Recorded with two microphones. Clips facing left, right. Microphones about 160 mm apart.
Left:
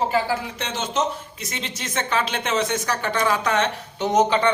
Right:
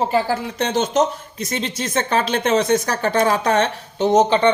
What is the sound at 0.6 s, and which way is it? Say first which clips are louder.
Speech: right 10 dB; 40° right (ahead or behind).